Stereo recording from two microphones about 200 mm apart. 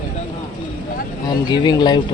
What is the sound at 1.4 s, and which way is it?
Speech, 20° left (ahead or behind).